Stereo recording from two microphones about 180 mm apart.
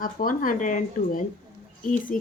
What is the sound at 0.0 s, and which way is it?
Speech, 50° left (ahead or behind).